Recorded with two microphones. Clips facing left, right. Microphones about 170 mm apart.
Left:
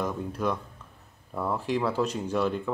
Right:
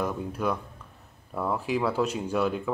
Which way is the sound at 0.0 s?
5° right (ahead or behind).